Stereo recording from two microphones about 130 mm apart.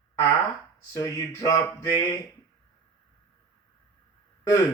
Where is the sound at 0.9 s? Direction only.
25° left (ahead or behind).